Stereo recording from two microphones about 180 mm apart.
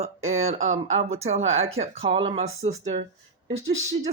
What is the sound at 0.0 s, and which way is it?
A man's voice, 40° right (ahead or behind).